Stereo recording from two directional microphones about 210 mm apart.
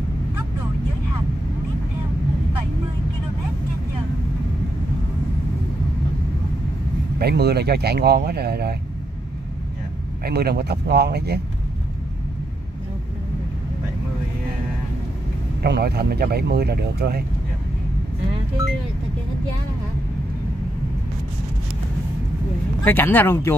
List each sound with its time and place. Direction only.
7.2 s speech: 50° right (ahead or behind)
10.2 s speech: 50° right (ahead or behind)
15.6 s speech: 50° right (ahead or behind)
22.8 s speech: 10° left (ahead or behind)